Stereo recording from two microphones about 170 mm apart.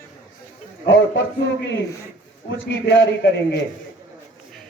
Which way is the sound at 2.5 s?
90° left.